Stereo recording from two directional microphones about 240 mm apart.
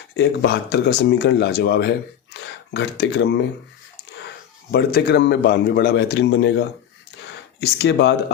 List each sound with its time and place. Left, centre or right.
0.2 s speech: left
4.7 s speech: left